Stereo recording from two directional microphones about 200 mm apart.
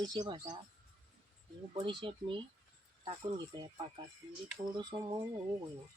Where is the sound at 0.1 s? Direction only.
20° right (ahead or behind).